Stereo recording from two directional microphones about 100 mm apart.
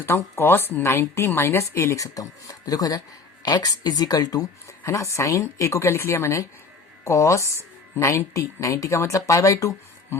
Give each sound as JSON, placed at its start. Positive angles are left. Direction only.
{"t": 0.0, "sound": "speech", "side_deg": 25}
{"t": 4.8, "sound": "speech", "side_deg": 30}